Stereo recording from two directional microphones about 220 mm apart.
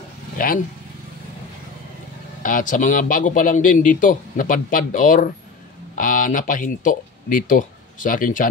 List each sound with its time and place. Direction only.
0.4 s a man's voice: 40° left (ahead or behind)
2.4 s a man's voice: 35° left (ahead or behind)